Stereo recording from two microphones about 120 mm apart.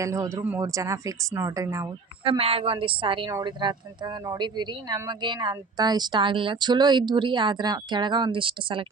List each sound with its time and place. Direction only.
0.0 s speech: 25° right (ahead or behind)
2.2 s a woman's voice: 50° right (ahead or behind)